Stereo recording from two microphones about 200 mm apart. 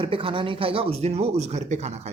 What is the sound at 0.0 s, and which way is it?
Speech, 25° right (ahead or behind).